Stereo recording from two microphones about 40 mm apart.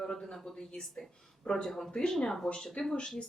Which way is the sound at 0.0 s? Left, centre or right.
Centre.